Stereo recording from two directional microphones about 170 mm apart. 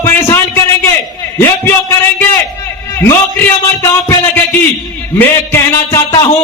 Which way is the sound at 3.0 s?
15° left (ahead or behind).